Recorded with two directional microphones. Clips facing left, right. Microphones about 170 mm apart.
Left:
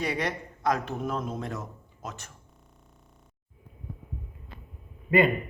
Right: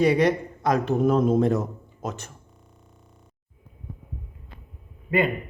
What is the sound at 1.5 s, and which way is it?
Speech, 40° right (ahead or behind).